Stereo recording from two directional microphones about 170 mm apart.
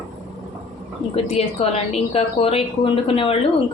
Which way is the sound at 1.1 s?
40° left (ahead or behind).